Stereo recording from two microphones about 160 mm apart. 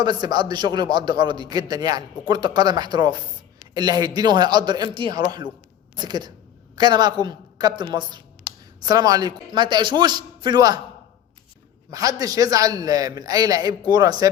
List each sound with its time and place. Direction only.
0.0 s a man's voice: 25° right (ahead or behind)
11.9 s a man's voice: 20° right (ahead or behind)